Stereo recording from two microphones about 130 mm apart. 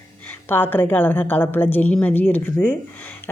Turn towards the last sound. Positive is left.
turn(degrees=15)  # may be behind; listen again after turning